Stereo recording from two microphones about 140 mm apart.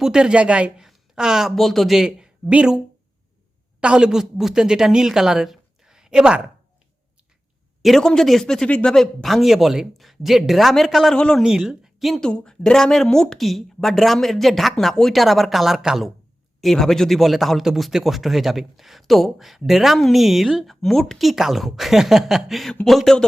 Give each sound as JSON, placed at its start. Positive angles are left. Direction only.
{"t": 0.0, "sound": "a woman's voice", "side_deg": -5}
{"t": 7.8, "sound": "a man's voice", "side_deg": 0}